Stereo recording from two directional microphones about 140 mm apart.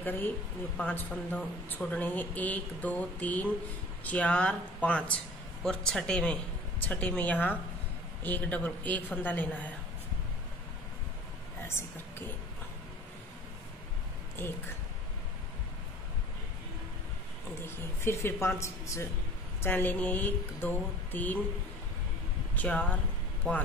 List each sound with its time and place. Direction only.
0.7 s speech: 10° left (ahead or behind)
14.4 s speech: 15° left (ahead or behind)
18.0 s speech: 15° left (ahead or behind)
22.6 s speech: 10° left (ahead or behind)